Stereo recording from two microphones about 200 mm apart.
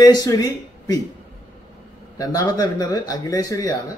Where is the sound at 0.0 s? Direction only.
20° left (ahead or behind).